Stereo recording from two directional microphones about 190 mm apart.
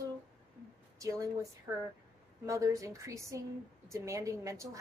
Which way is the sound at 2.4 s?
15° right (ahead or behind).